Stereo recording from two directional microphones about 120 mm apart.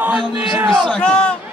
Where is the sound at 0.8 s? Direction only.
5° left (ahead or behind).